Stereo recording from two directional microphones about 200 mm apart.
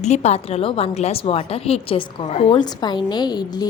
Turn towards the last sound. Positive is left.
turn(degrees=20)  # may be behind; listen again after turning